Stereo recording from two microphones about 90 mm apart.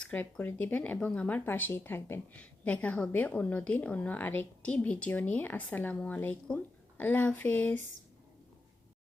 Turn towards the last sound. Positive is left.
turn(degrees=20)  # may be behind; listen again after turning